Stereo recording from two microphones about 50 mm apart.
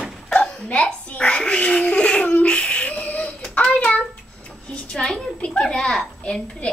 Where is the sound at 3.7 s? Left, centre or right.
Left.